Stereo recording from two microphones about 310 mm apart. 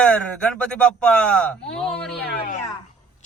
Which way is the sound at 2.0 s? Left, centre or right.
Left.